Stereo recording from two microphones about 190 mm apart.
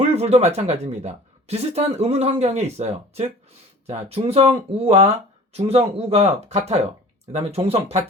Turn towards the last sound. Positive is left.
turn(degrees=-30)  # may be behind; listen again after turning